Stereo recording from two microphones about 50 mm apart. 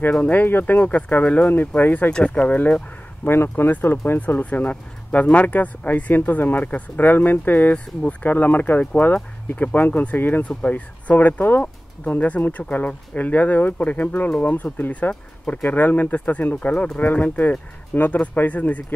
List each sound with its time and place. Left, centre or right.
0.2 s speech: left
2.0 s speech: left
3.4 s speech: left
4.5 s speech: left
17.0 s speech: left